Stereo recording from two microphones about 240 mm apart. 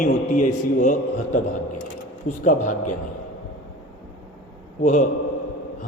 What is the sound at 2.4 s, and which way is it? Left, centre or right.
Speech, left.